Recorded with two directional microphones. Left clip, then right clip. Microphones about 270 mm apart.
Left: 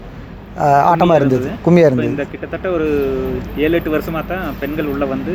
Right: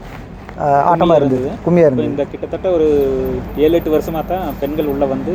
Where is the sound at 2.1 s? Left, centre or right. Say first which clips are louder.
Right 3 dB; centre.